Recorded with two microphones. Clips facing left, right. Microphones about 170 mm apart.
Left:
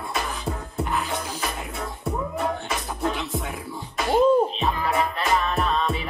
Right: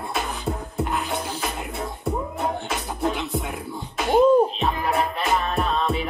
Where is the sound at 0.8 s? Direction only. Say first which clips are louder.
Even; centre (ahead or behind).